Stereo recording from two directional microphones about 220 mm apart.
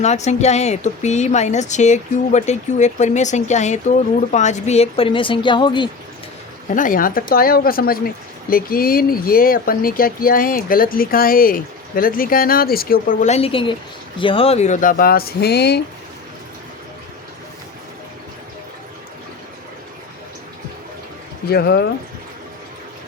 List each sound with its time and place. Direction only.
0.0 s a woman's voice: 30° left (ahead or behind)
6.7 s a woman's voice: 35° left (ahead or behind)
21.5 s speech: 45° left (ahead or behind)